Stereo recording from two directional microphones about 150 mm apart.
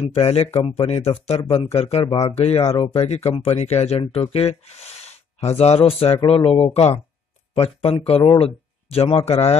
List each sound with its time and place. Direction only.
0.1 s speech: 40° left (ahead or behind)
8.3 s a sound: 40° left (ahead or behind)
9.2 s speech: 45° left (ahead or behind)